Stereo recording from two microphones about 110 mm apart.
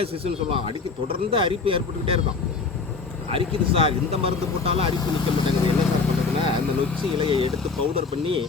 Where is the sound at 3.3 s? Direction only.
55° right (ahead or behind).